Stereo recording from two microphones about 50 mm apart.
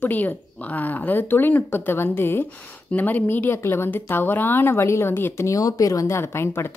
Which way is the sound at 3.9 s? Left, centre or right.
Left.